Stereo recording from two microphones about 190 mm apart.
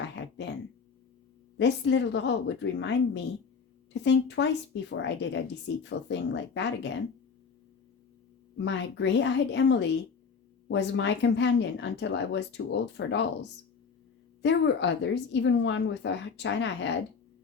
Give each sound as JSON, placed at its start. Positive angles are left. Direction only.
{"t": 0.2, "sound": "a sound", "side_deg": 65}
{"t": 1.5, "sound": "speech", "side_deg": 70}
{"t": 4.0, "sound": "speech", "side_deg": 70}
{"t": 8.5, "sound": "speech", "side_deg": 70}
{"t": 14.4, "sound": "speech", "side_deg": 70}